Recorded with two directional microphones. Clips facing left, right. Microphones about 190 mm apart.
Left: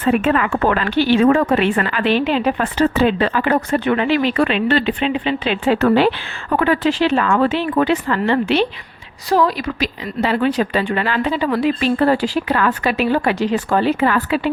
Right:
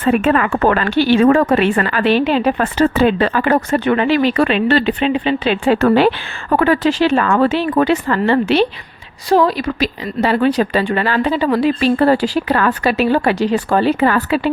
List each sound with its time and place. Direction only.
0.0 s speech: 50° right (ahead or behind)
9.3 s a woman's voice: 30° right (ahead or behind)
10.2 s speech: 40° right (ahead or behind)